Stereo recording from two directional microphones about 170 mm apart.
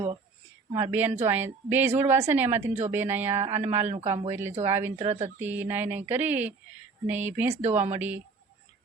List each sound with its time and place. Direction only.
0.8 s speech: 10° right (ahead or behind)
3.8 s speech: 35° right (ahead or behind)
4.3 s speech: 15° right (ahead or behind)
4.9 s speech: 40° right (ahead or behind)
5.4 s speech: 10° right (ahead or behind)
7.6 s speech: 40° right (ahead or behind)
7.9 s speech: 10° right (ahead or behind)